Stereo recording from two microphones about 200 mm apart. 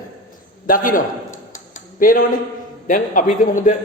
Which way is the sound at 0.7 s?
45° left (ahead or behind).